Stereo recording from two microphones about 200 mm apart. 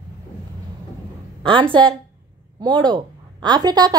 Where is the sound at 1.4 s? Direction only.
25° right (ahead or behind).